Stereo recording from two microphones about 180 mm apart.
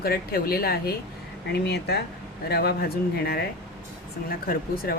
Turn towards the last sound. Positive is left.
turn(degrees=55)  # may be behind; listen again after turning